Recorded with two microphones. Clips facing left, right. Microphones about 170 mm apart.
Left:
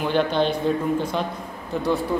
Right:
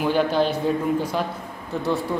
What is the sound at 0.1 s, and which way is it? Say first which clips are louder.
Speech: left 1 dB; 5° right (ahead or behind).